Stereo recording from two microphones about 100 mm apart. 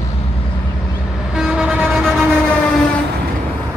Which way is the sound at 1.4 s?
10° right (ahead or behind).